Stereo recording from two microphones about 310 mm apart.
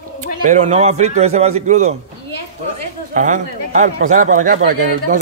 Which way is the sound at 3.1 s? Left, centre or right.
Right.